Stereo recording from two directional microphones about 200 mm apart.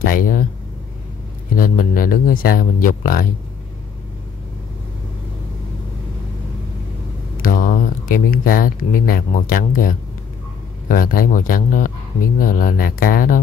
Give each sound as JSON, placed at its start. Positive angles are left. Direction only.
{"t": 0.0, "sound": "speech", "side_deg": 45}
{"t": 1.5, "sound": "speech", "side_deg": 45}
{"t": 7.4, "sound": "speech", "side_deg": 45}